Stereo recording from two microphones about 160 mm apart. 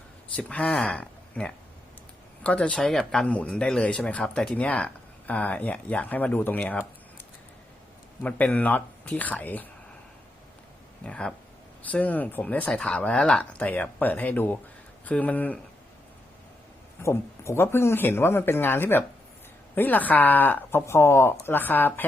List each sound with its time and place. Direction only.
0.3 s speech: 5° left (ahead or behind)
8.2 s speech: 10° left (ahead or behind)
11.0 s speech: 5° left (ahead or behind)
17.0 s speech: 15° left (ahead or behind)